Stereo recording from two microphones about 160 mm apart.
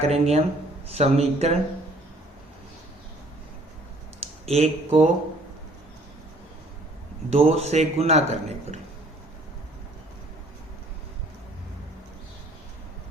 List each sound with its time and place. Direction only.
0.0 s a man's voice: 40° right (ahead or behind)
4.4 s speech: 40° right (ahead or behind)
7.3 s a man's voice: 40° right (ahead or behind)